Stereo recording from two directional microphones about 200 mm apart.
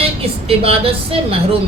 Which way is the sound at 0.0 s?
30° right (ahead or behind).